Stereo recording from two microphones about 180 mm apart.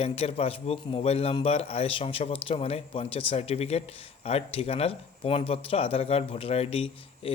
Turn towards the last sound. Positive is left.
turn(degrees=30)  # may be behind; listen again after turning